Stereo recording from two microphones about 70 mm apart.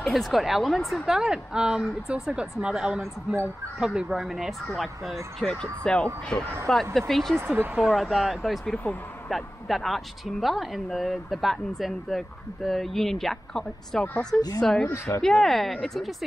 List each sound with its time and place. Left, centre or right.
0.0 s speech: centre
1.0 s speech: centre
6.7 s speech: centre
7.3 s speech: right
7.9 s speech: centre
14.9 s speech: left
15.2 s speech: centre